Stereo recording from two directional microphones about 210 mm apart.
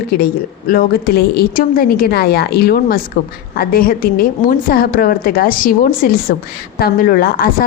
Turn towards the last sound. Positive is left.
turn(degrees=45)  # may be behind; listen again after turning